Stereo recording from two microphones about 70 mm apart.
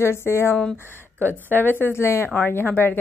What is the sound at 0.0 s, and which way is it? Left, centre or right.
A woman's voice, left.